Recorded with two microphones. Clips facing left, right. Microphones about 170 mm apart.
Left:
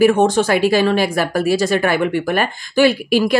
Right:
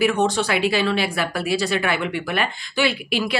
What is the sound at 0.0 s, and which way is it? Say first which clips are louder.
A woman's voice: left 7 dB; 50° left (ahead or behind).